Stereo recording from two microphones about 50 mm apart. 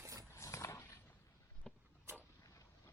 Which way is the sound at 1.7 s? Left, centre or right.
Centre.